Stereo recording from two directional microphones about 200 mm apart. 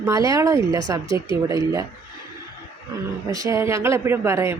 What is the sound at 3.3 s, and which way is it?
Speech, 15° right (ahead or behind).